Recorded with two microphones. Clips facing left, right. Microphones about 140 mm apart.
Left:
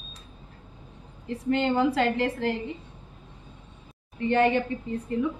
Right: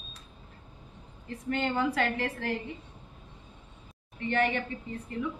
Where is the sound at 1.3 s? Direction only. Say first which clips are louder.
Left 6 dB; 25° left (ahead or behind).